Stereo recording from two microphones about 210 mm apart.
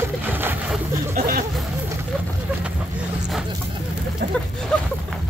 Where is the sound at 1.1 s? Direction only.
45° right (ahead or behind).